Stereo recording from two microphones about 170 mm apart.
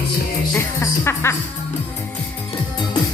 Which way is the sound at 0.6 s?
15° left (ahead or behind).